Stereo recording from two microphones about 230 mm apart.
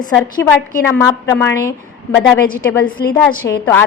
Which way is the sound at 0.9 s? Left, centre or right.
Centre.